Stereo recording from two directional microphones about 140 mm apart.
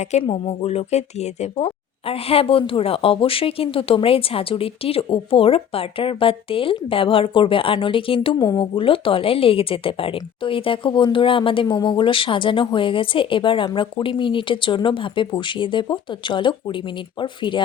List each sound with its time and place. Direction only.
0.0 s a woman's voice: 50° left (ahead or behind)